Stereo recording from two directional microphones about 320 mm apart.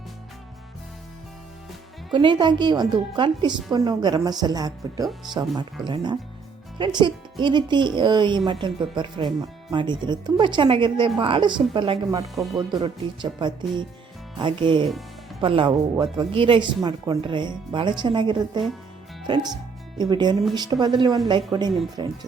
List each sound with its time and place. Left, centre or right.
2.1 s a woman's voice: centre
20.0 s a woman's voice: centre